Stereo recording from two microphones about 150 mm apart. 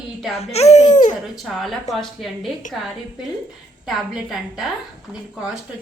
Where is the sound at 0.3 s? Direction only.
45° left (ahead or behind).